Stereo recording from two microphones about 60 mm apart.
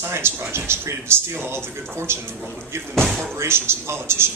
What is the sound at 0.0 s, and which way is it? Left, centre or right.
Speech, right.